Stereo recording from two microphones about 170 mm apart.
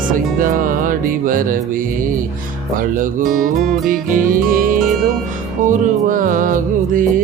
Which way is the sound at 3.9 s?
55° right (ahead or behind).